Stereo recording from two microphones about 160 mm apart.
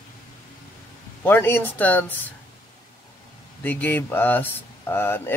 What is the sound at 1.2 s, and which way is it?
Speech, 15° left (ahead or behind).